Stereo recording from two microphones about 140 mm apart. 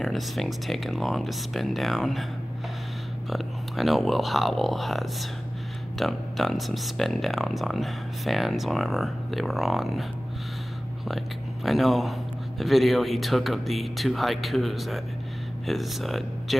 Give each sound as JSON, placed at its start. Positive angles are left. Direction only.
{"t": 0.0, "sound": "speech", "side_deg": 0}
{"t": 3.3, "sound": "speech", "side_deg": 0}
{"t": 11.1, "sound": "speech", "side_deg": 0}